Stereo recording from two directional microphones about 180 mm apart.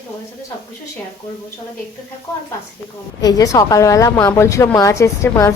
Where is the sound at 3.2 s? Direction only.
20° left (ahead or behind).